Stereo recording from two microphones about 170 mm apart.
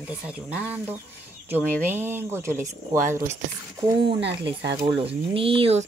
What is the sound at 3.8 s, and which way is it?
Speech, 30° right (ahead or behind).